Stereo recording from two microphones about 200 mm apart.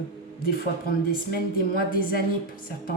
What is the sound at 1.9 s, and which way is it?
Speech, 45° left (ahead or behind).